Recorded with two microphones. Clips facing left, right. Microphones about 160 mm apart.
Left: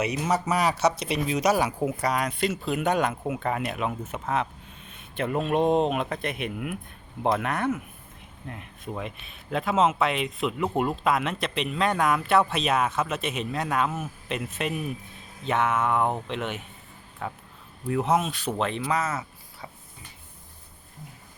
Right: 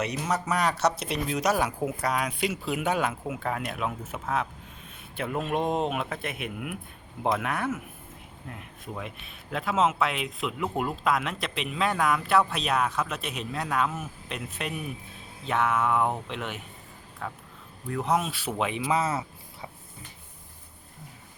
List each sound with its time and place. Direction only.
0.0 s speech: 5° left (ahead or behind)
18.9 s speech: 30° right (ahead or behind)